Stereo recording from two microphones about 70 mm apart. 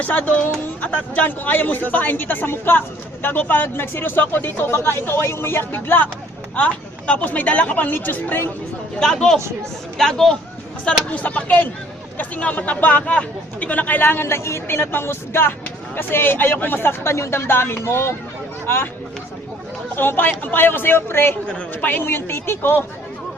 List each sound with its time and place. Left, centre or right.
0.0 s speech: left
9.0 s speech: centre
10.8 s speech: centre
20.0 s speech: left
21.4 s speech: centre
21.8 s speech: left